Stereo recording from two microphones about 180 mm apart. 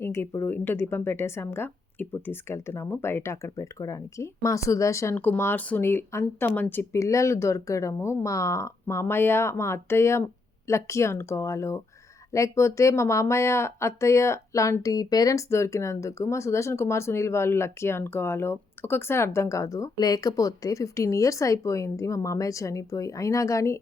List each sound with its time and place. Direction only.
0.0 s speech: 15° left (ahead or behind)